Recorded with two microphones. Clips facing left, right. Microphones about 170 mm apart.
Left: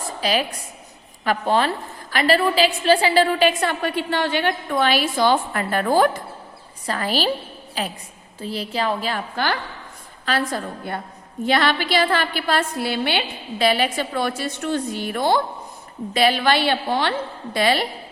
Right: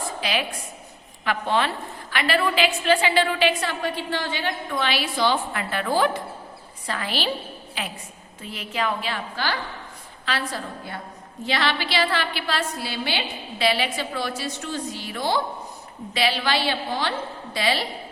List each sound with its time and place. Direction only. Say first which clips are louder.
0.2 s a woman's voice: left 7 dB; 40° left (ahead or behind)